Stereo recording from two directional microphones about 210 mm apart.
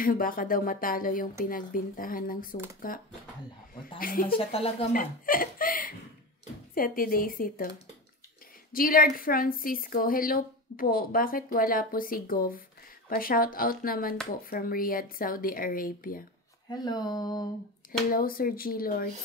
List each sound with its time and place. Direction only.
0.0 s a woman's voice: 40° left (ahead or behind)
4.0 s a woman's voice: 40° left (ahead or behind)
4.4 s speech: 30° left (ahead or behind)
4.9 s a woman's voice: 40° left (ahead or behind)
8.7 s a woman's voice: 45° left (ahead or behind)
16.6 s speech: 20° left (ahead or behind)
18.1 s a woman's voice: 45° left (ahead or behind)